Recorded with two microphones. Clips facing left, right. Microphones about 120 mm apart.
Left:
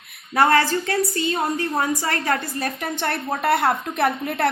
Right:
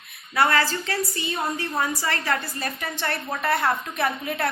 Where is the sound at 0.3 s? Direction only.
45° left (ahead or behind).